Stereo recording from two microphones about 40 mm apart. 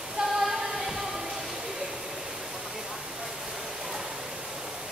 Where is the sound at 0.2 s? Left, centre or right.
Right.